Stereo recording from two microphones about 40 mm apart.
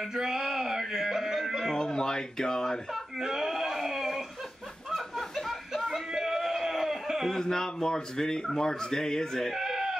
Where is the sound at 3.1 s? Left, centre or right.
Centre.